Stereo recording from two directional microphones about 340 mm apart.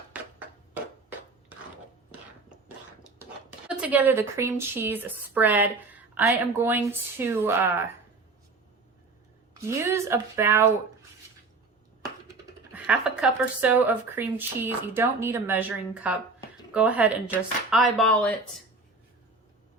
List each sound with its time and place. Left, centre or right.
0.1 s music: centre
3.7 s a woman's voice: centre
9.6 s a woman's voice: centre
12.7 s a woman's voice: centre